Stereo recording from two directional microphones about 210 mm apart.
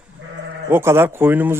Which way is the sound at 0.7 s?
10° right (ahead or behind).